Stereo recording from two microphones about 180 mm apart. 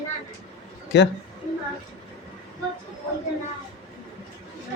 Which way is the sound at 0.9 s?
75° left (ahead or behind).